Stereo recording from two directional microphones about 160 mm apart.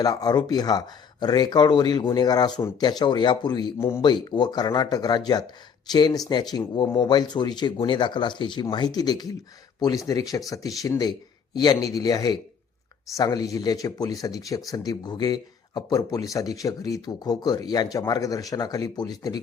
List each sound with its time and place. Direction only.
0.0 s speech: 25° left (ahead or behind)
3.8 s speech: 15° left (ahead or behind)
4.0 s speech: 25° left (ahead or behind)